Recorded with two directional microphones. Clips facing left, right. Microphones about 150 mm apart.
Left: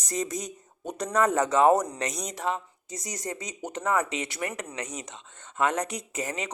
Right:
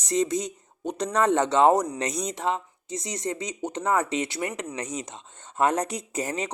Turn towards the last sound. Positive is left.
turn(degrees=-35)  # may be behind; listen again after turning